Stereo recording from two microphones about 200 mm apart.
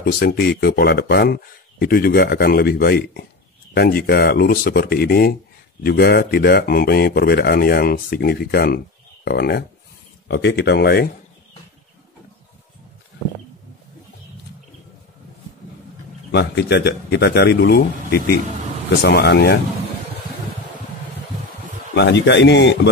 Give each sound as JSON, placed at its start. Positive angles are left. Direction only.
{"t": 0.0, "sound": "speech", "side_deg": 50}
{"t": 16.3, "sound": "speech", "side_deg": 55}
{"t": 21.9, "sound": "speech", "side_deg": 60}